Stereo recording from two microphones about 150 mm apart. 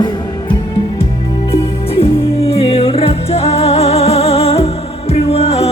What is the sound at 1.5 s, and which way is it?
Music, 40° left (ahead or behind).